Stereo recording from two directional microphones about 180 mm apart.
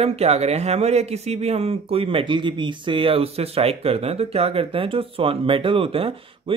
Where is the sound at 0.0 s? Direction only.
35° right (ahead or behind).